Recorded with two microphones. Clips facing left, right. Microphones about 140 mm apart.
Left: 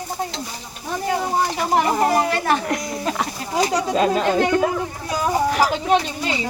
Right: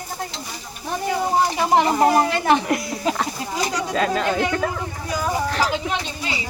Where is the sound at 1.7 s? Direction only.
25° right (ahead or behind).